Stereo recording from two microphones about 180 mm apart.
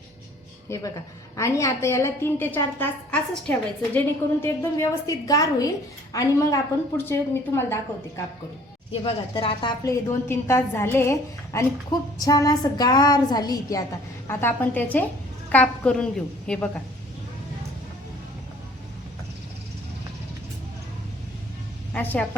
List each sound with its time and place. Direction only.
0.7 s a woman's voice: 15° left (ahead or behind)
9.3 s a woman's voice: 30° left (ahead or behind); by 16.8 s 5° left (ahead or behind)
21.9 s a woman's voice: 10° left (ahead or behind)